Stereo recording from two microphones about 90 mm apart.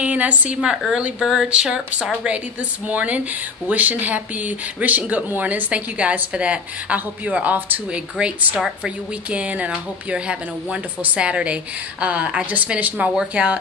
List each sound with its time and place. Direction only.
0.0 s a woman's voice: 15° right (ahead or behind)